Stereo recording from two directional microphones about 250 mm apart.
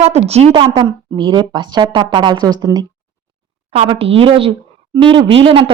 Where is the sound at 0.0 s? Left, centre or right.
Right.